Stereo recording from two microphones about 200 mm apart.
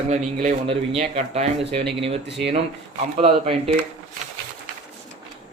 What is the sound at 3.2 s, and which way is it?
Speech, 30° right (ahead or behind).